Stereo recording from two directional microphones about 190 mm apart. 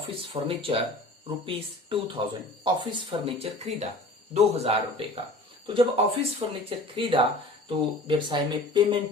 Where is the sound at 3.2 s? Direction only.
35° right (ahead or behind).